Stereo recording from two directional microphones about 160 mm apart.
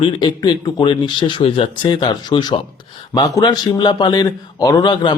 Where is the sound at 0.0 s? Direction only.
30° left (ahead or behind).